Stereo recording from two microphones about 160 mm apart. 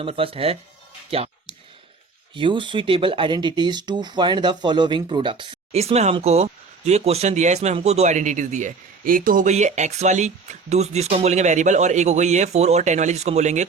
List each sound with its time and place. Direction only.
0.0 s speech: 35° right (ahead or behind)
2.3 s speech: 30° right (ahead or behind); by 13.7 s 45° right (ahead or behind)